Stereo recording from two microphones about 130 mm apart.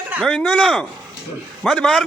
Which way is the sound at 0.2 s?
10° left (ahead or behind).